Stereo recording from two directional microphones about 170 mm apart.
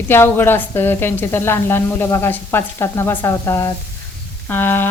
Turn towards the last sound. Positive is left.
turn(degrees=15)  # may be behind; listen again after turning